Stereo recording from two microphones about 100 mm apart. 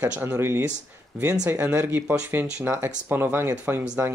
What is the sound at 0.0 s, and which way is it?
Speech, 20° right (ahead or behind).